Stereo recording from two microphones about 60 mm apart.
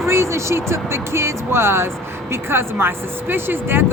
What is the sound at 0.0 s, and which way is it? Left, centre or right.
Speech, right.